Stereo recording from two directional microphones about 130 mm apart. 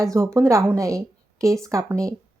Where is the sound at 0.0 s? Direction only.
20° right (ahead or behind).